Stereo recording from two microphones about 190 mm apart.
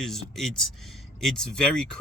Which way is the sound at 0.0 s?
Centre (ahead or behind).